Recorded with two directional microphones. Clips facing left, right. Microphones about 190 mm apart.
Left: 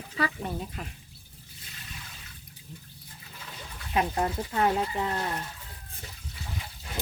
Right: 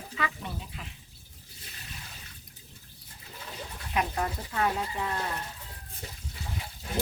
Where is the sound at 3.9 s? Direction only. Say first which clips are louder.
Left 3 dB; 30° left (ahead or behind).